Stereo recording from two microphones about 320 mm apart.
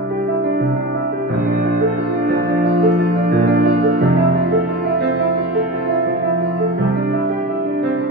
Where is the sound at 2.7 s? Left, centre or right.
Right.